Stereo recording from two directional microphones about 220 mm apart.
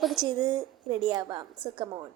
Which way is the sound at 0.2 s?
20° right (ahead or behind).